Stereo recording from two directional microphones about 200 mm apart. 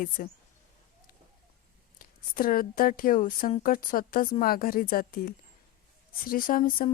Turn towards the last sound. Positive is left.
turn(degrees=40)  # may be behind; listen again after turning